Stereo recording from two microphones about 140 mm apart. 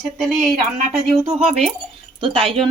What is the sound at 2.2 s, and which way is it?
Speech, 40° right (ahead or behind).